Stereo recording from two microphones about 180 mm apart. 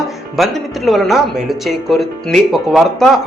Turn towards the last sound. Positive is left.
turn(degrees=0)  # may be behind; listen again after turning